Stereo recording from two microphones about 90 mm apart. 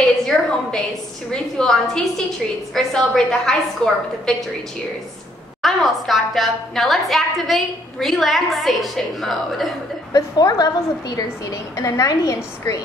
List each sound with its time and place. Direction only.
0.3 s a sound: 5° left (ahead or behind)
1.3 s a woman's voice: 10° left (ahead or behind)
5.6 s a woman's voice: centre (ahead or behind)
10.1 s a woman's voice: 45° left (ahead or behind)